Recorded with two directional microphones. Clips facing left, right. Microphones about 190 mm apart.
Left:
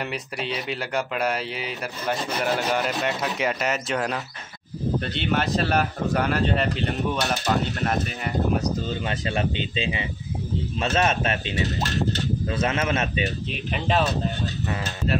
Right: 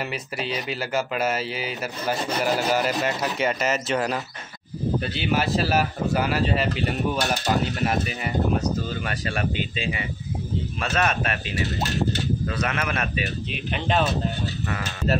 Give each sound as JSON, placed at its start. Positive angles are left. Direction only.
{"t": 0.0, "sound": "speech", "side_deg": 0}
{"t": 8.7, "sound": "speech", "side_deg": 20}
{"t": 13.5, "sound": "speech", "side_deg": 0}